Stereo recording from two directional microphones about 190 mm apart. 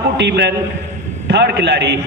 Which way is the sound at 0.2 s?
65° right (ahead or behind).